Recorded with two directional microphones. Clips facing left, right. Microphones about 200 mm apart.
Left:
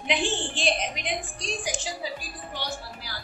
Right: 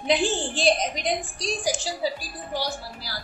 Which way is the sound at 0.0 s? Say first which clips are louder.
Right 4 dB; 35° right (ahead or behind).